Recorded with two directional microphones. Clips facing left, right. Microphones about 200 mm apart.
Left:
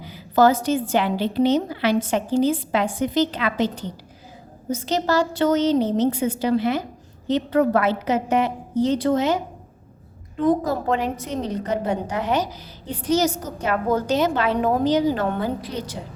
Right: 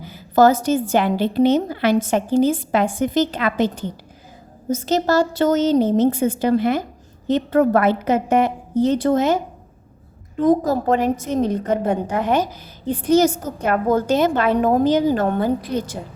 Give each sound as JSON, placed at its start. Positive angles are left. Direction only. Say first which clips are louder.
{"t": 0.0, "sound": "a woman's voice", "louder": "right 3 dB", "side_deg": -45}
{"t": 10.4, "sound": "a woman's voice", "louder": "right 4 dB", "side_deg": -40}